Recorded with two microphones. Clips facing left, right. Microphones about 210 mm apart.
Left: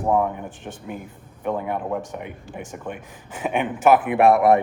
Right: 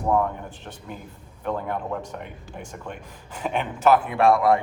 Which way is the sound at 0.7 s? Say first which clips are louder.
Left 7 dB; 55° left (ahead or behind).